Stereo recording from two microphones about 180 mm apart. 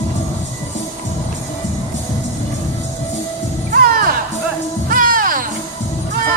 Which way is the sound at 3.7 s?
55° right (ahead or behind).